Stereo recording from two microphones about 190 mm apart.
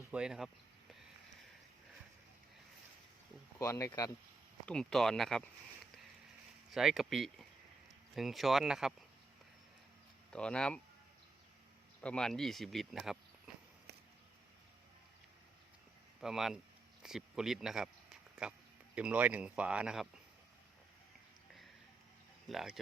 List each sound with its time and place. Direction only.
0.1 s speech: 5° right (ahead or behind)
3.6 s speech: 15° left (ahead or behind)
4.6 s speech: 5° left (ahead or behind)
6.7 s speech: centre (ahead or behind)
10.3 s speech: 5° left (ahead or behind)
12.0 s speech: 5° left (ahead or behind)
16.2 s speech: centre (ahead or behind)
22.4 s speech: centre (ahead or behind)